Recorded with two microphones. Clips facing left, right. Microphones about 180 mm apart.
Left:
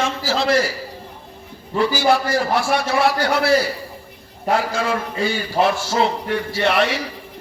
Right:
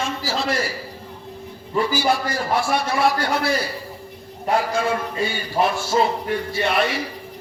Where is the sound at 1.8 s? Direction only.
75° left (ahead or behind).